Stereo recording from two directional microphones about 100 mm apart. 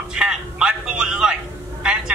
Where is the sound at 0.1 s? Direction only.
10° right (ahead or behind).